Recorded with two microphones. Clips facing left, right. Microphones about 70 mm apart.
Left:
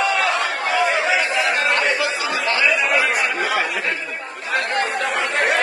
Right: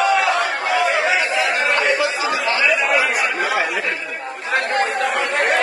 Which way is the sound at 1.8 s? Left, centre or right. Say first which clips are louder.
Right 2 dB; right.